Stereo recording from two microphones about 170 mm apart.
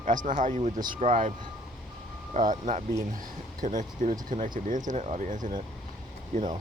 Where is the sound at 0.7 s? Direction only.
25° right (ahead or behind).